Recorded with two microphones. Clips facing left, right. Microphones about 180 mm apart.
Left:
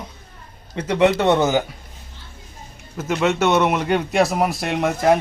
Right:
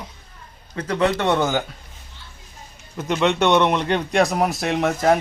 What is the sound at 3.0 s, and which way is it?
Speech, 5° left (ahead or behind).